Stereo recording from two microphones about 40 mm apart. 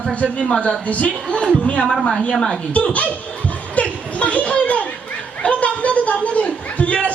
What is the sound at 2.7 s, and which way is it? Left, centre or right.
Speech, left.